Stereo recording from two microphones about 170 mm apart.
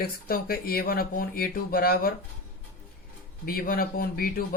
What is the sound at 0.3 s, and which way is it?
Speech, 60° left (ahead or behind).